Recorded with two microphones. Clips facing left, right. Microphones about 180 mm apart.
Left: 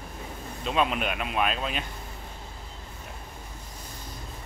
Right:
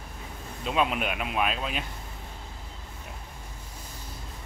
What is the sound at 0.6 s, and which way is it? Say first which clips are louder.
Speech: even; 5° right (ahead or behind).